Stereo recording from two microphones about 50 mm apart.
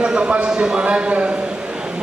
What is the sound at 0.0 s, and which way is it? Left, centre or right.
A man's voice, right.